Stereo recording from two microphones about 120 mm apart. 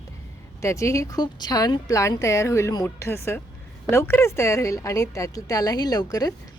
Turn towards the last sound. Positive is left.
turn(degrees=30)  # may be behind; listen again after turning